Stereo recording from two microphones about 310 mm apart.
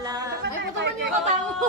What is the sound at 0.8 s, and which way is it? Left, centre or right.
Chatter, right.